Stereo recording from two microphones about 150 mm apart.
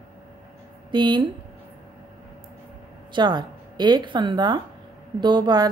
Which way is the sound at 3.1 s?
30° right (ahead or behind).